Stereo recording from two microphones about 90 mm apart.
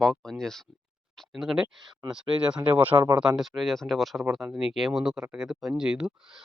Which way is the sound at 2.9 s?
50° right (ahead or behind).